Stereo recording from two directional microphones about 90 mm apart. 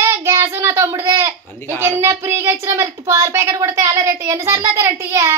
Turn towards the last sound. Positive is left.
turn(degrees=-35)  # may be behind; listen again after turning